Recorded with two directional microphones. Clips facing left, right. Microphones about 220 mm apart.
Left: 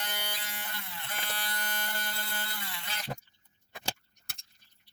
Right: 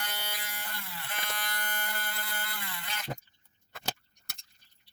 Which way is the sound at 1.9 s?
25° left (ahead or behind).